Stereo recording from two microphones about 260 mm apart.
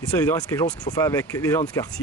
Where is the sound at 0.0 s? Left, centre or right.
Centre.